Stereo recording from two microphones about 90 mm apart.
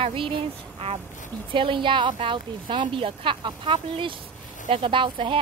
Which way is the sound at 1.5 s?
70° right (ahead or behind).